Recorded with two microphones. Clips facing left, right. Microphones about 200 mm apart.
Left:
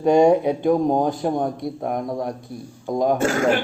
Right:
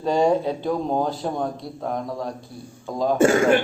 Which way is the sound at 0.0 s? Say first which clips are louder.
Left 5 dB; 15° left (ahead or behind).